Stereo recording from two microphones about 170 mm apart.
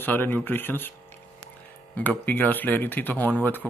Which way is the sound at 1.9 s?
10° left (ahead or behind).